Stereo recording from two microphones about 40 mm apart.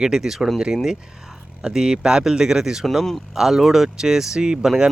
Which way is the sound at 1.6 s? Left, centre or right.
Centre.